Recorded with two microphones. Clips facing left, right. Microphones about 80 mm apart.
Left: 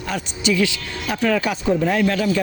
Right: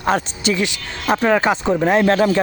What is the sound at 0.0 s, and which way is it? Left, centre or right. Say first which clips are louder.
Speech: right 5 dB; right.